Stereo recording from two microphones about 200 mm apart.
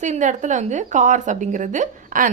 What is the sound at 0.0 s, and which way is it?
A woman's voice, 40° right (ahead or behind).